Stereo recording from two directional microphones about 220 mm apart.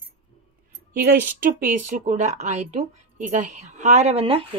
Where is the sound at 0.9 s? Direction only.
45° right (ahead or behind).